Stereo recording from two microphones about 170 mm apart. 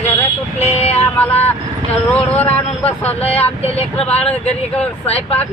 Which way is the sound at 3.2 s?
35° left (ahead or behind).